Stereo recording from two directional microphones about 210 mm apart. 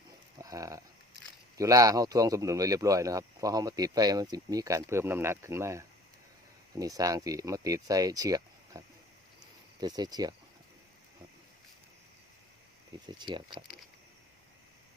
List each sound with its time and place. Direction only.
0.3 s a sound: 15° right (ahead or behind)
1.5 s speech: 15° right (ahead or behind)
9.8 s speech: 20° right (ahead or behind)
13.1 s speech: 20° right (ahead or behind)